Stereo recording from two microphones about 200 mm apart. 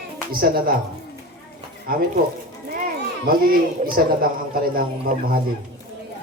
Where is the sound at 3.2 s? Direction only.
45° right (ahead or behind).